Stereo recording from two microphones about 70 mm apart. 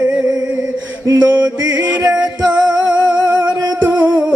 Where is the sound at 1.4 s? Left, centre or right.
Right.